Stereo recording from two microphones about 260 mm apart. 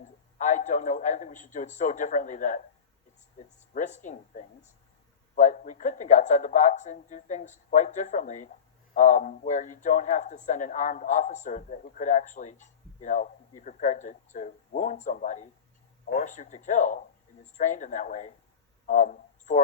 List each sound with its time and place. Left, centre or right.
0.0 s speech: left
18.9 s didgeridoo: left